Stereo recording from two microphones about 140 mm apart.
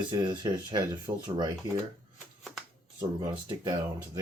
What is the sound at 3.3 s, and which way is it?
Speech, 35° right (ahead or behind).